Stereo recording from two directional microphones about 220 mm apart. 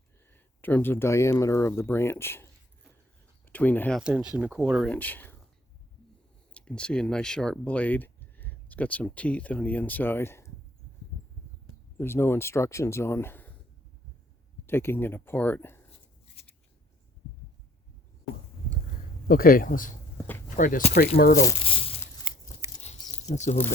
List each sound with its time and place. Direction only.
0.3 s speech: 10° left (ahead or behind)
6.5 s speech: 5° left (ahead or behind)
11.9 s speech: 10° left (ahead or behind)
14.7 s speech: 10° left (ahead or behind)
19.3 s speech: 40° left (ahead or behind)
21.4 s crumpling: 25° left (ahead or behind)
22.6 s biting: 10° right (ahead or behind)
23.2 s speech: 30° left (ahead or behind)